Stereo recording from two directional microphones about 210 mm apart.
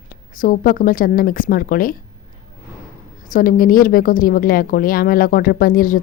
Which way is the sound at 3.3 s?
40° left (ahead or behind).